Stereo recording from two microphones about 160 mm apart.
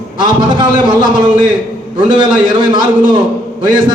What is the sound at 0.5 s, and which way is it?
Speech, 30° right (ahead or behind).